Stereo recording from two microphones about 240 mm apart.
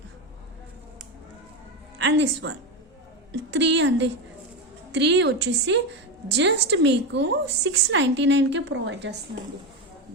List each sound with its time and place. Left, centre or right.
2.0 s a woman's voice: right